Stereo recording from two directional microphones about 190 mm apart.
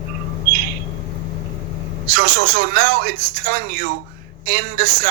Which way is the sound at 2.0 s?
50° right (ahead or behind).